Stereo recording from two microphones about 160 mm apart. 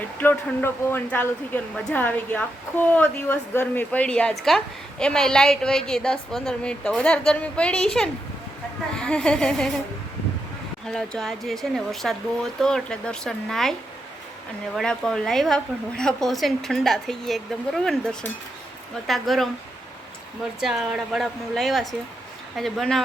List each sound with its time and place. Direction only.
0.2 s speech: 15° left (ahead or behind)
10.8 s speech: 5° left (ahead or behind)
14.8 s speech: 5° left (ahead or behind)
20.6 s speech: centre (ahead or behind)